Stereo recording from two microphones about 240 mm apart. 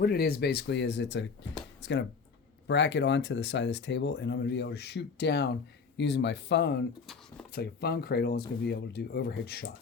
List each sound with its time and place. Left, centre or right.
0.0 s speech: left